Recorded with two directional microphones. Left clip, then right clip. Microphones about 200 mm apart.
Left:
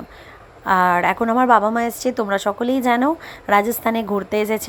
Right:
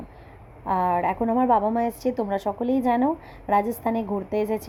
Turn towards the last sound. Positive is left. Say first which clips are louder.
# left 5 dB
turn(degrees=15)  # may be behind; listen again after turning